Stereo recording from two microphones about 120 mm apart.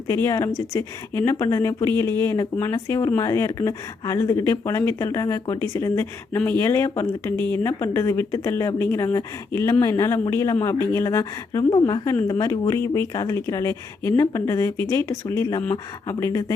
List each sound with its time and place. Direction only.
0.1 s speech: 25° left (ahead or behind)
11.7 s a woman's voice: 35° left (ahead or behind)